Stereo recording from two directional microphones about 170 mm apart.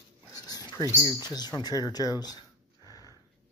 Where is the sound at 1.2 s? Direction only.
25° left (ahead or behind).